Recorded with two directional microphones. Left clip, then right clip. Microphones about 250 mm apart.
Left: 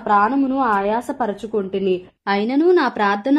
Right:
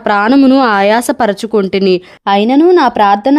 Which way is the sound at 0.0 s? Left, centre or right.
Right.